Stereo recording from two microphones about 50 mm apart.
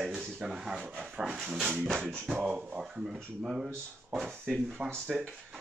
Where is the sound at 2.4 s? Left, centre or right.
Right.